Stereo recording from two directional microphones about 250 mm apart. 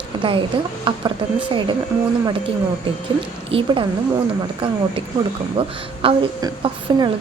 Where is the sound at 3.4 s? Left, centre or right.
Right.